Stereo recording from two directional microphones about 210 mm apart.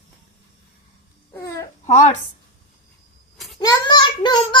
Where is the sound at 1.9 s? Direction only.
35° left (ahead or behind).